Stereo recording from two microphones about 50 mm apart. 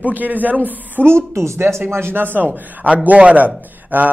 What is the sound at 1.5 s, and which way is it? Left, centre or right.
A man's voice, right.